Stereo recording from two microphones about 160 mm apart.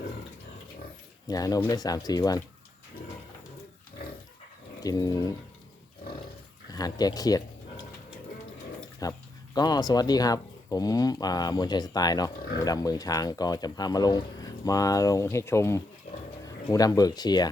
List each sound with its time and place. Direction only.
1.3 s speech: 25° left (ahead or behind)
4.8 s speech: 25° left (ahead or behind)
6.7 s speech: 25° left (ahead or behind)
9.0 s speech: 25° left (ahead or behind)